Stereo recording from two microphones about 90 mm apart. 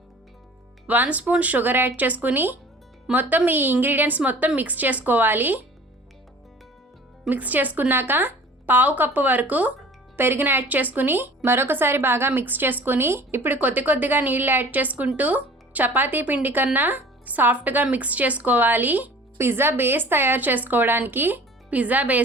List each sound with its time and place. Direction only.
0.9 s a woman's voice: 15° right (ahead or behind)
7.3 s a woman's voice: 20° right (ahead or behind)